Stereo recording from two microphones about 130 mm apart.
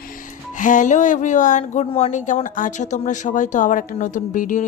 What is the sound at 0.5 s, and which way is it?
Speech, 80° left.